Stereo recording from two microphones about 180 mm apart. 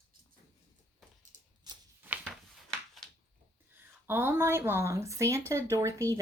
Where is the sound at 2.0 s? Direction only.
10° right (ahead or behind).